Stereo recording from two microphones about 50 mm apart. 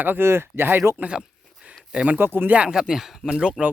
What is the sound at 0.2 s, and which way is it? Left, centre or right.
Speech, right.